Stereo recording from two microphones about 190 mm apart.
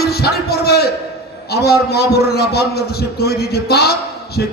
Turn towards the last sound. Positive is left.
turn(degrees=60)  # may be behind; listen again after turning